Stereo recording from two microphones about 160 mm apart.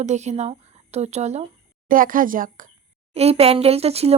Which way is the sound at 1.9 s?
60° right (ahead or behind).